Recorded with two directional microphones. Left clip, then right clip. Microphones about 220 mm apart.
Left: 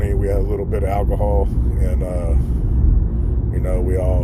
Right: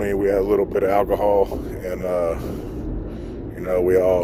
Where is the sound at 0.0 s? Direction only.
50° right (ahead or behind).